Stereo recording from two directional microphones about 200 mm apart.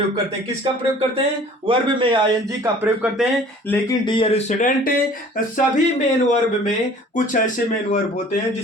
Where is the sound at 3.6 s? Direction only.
10° left (ahead or behind).